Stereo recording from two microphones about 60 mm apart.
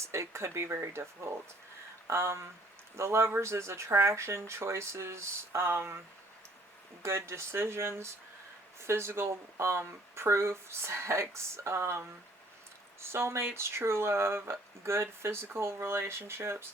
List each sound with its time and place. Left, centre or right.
0.0 s speech: right
7.0 s speech: right